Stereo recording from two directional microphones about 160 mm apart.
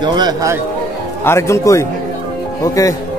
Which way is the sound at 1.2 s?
15° left (ahead or behind).